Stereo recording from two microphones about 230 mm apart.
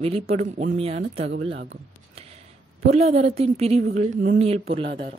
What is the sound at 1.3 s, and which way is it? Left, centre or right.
Speech, right.